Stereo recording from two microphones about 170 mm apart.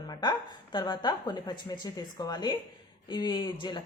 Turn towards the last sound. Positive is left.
turn(degrees=25)  # may be behind; listen again after turning